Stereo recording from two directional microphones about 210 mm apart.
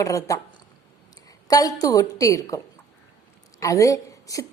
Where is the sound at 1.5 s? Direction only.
15° left (ahead or behind).